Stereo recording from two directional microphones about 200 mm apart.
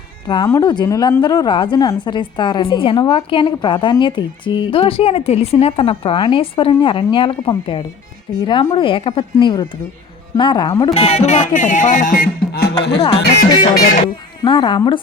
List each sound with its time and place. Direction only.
0.3 s a woman's voice: 20° left (ahead or behind)
10.9 s music: 30° left (ahead or behind); by 12.7 s 50° left (ahead or behind)
13.3 s speech: 50° left (ahead or behind)
14.4 s a woman's voice: 25° left (ahead or behind)